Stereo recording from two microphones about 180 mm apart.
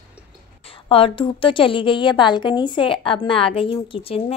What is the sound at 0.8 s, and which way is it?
A woman's voice, 30° left (ahead or behind).